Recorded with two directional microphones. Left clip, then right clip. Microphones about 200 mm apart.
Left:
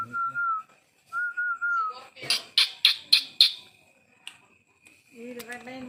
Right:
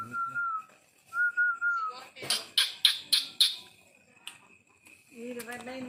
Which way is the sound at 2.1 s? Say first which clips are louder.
Left 3 dB; 5° right (ahead or behind).